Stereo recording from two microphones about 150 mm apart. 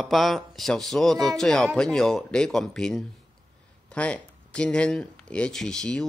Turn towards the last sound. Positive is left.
turn(degrees=5)  # may be behind; listen again after turning